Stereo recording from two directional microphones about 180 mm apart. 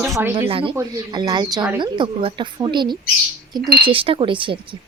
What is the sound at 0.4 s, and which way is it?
Speech, 30° right (ahead or behind).